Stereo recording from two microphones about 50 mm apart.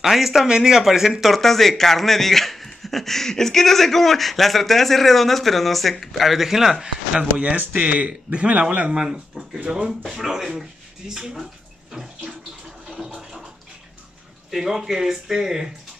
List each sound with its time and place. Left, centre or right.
0.0 s a man's voice: centre
7.2 s a man's voice: right
11.9 s bathtub: centre
12.9 s a sound: centre
14.5 s speech: centre